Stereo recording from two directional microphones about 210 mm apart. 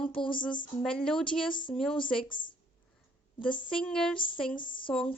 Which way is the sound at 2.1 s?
20° left (ahead or behind).